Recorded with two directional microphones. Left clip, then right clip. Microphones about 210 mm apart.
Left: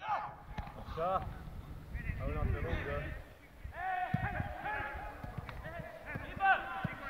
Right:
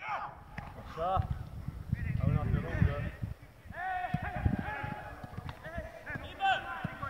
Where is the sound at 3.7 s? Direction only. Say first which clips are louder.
Right 1 dB; 55° right (ahead or behind).